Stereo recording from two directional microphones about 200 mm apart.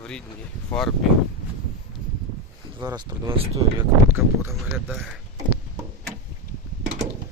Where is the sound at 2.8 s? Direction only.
20° right (ahead or behind).